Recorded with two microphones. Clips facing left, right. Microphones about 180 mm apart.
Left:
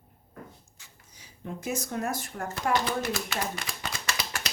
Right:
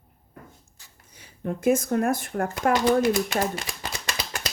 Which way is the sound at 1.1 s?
60° right (ahead or behind).